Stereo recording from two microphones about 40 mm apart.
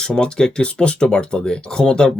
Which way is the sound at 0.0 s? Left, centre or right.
Centre.